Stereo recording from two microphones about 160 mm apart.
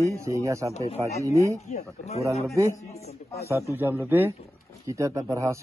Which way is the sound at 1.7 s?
40° left (ahead or behind).